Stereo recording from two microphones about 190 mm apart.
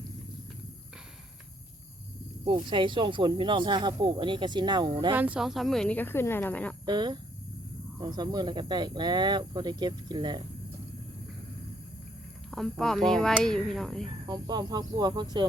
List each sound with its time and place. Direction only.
2.4 s speech: 25° right (ahead or behind)
5.1 s a woman's voice: 10° right (ahead or behind); by 6.7 s 10° left (ahead or behind)
6.8 s speech: 20° right (ahead or behind)
12.5 s speech: centre (ahead or behind)
14.0 s speech: 20° right (ahead or behind)